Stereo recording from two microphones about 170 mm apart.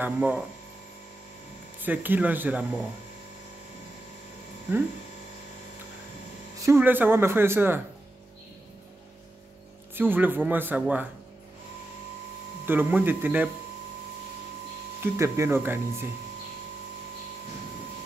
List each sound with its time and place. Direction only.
0.0 s speech: 10° right (ahead or behind)
1.8 s speech: 10° right (ahead or behind)
6.6 s speech: 15° right (ahead or behind)
9.9 s speech: 10° right (ahead or behind)
12.6 s speech: 10° right (ahead or behind)
15.1 s speech: 15° right (ahead or behind)